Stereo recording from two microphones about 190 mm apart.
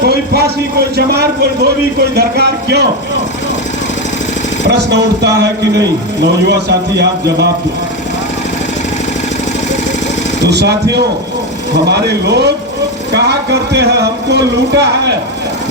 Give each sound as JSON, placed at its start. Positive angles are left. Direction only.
{"t": 0.0, "sound": "a sound", "side_deg": -60}
{"t": 0.9, "sound": "speech", "side_deg": -60}
{"t": 4.7, "sound": "speech", "side_deg": -60}
{"t": 10.5, "sound": "speech", "side_deg": -60}
{"t": 11.9, "sound": "speech", "side_deg": -60}